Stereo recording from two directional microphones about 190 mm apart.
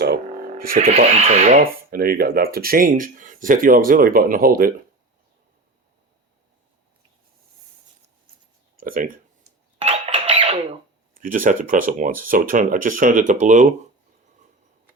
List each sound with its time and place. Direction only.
0.5 s music: 50° right (ahead or behind)
0.8 s speech: 35° right (ahead or behind)
8.8 s speech: 45° right (ahead or behind)
9.7 s a sound: 35° right (ahead or behind)
11.1 s speech: 45° right (ahead or behind)